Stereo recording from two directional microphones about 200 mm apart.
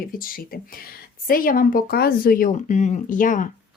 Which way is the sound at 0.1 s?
45° left (ahead or behind).